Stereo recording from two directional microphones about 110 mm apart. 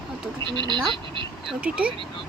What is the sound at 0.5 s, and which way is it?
Speech, 45° right (ahead or behind).